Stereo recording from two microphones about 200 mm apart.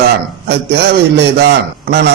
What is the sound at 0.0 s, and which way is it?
A man's voice, 55° right (ahead or behind).